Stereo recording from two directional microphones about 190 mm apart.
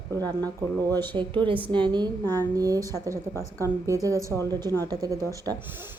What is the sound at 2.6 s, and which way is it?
Speech, 20° right (ahead or behind).